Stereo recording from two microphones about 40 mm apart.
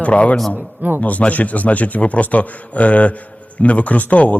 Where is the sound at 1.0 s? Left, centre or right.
Left.